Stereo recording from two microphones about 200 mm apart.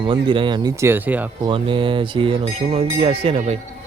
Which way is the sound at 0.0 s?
25° right (ahead or behind).